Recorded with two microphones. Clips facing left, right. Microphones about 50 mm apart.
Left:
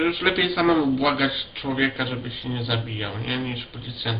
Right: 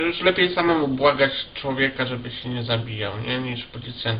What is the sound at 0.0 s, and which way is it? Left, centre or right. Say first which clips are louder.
Speech: right 2 dB; centre.